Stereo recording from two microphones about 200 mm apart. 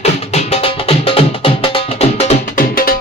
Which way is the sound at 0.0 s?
30° left (ahead or behind).